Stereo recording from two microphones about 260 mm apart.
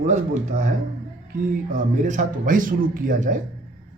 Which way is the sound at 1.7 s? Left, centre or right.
Right.